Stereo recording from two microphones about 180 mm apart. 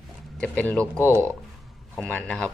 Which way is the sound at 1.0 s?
15° right (ahead or behind).